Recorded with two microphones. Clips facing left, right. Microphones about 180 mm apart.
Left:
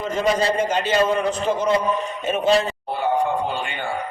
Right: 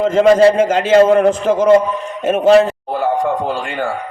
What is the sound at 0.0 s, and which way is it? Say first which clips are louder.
A man's voice: right 11 dB; 90° right.